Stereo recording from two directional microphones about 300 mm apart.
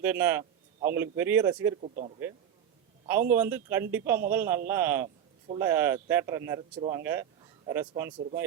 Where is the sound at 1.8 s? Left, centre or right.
Right.